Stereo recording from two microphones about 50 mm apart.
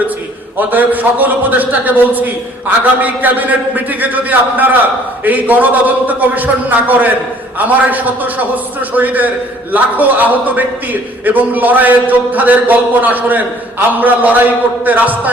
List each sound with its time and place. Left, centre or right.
0.7 s a man's voice: right